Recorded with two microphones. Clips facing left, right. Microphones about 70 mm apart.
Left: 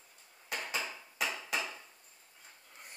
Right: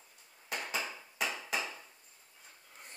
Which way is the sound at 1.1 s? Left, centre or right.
Centre.